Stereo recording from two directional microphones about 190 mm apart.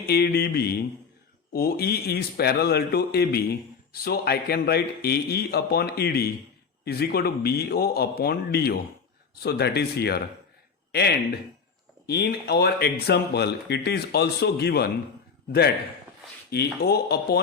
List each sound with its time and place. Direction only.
0.1 s speech: 55° left (ahead or behind)
12.0 s speech: 60° left (ahead or behind)
16.5 s speech: 55° left (ahead or behind)